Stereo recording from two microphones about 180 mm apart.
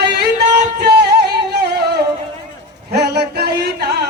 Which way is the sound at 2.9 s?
65° right (ahead or behind).